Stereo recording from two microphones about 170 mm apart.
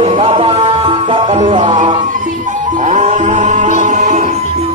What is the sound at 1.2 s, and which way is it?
Music, 40° right (ahead or behind).